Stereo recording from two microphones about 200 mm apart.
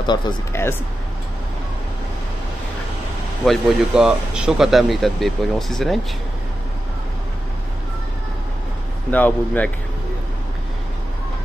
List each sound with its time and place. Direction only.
0.0 s speech: 20° left (ahead or behind)
3.4 s speech: 5° right (ahead or behind)
9.1 s speech: 10° left (ahead or behind)